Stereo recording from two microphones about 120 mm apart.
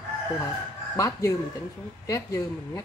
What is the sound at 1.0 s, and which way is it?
Speech, 25° left (ahead or behind).